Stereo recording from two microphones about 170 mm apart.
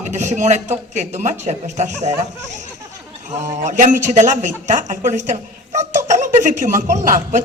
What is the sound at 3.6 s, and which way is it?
Speech, 45° right (ahead or behind).